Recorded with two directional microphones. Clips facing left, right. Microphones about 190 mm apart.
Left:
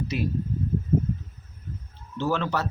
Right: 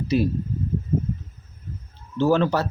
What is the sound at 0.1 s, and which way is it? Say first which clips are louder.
Speech: right 9 dB; 35° right (ahead or behind).